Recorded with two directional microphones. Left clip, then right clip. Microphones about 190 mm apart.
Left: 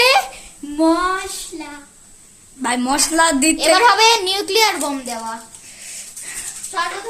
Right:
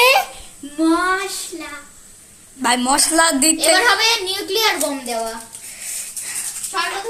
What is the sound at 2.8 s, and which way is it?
Speech, 20° left (ahead or behind).